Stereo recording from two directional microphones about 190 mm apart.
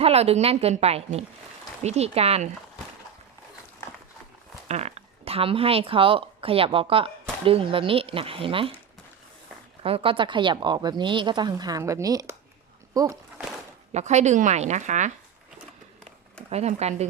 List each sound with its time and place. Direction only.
0.0 s a woman's voice: 30° right (ahead or behind)
4.7 s speech: 35° right (ahead or behind)
9.8 s speech: 30° right (ahead or behind)
13.9 s a woman's voice: 35° right (ahead or behind)
16.5 s a woman's voice: 35° right (ahead or behind)